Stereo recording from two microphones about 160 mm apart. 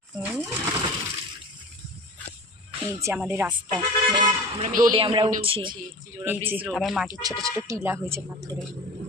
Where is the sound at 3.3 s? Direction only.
15° right (ahead or behind).